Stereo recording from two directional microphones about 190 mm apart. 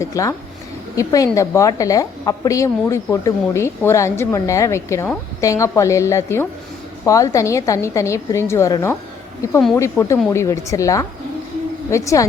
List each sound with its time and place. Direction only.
0.0 s a woman's voice: 15° left (ahead or behind)